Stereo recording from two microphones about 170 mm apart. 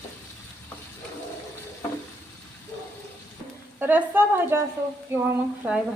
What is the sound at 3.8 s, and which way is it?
A woman's voice, 10° right (ahead or behind).